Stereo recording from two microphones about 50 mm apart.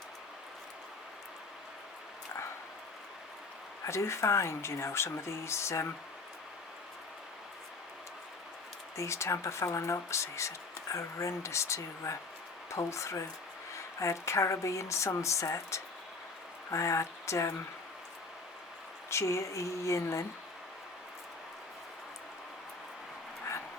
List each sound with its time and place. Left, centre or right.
3.8 s speech: left
9.0 s speech: left
12.7 s speech: left
19.1 s speech: left